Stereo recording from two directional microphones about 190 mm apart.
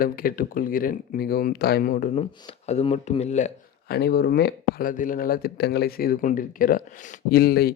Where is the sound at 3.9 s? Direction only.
60° left (ahead or behind).